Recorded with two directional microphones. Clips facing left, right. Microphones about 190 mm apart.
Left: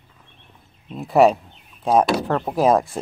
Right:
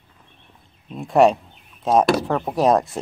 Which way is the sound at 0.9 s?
Centre (ahead or behind).